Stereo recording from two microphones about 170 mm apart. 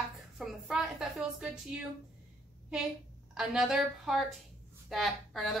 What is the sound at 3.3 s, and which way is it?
A woman's voice, centre (ahead or behind).